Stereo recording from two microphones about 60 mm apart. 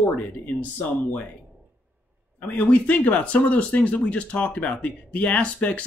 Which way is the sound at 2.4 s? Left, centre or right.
Left.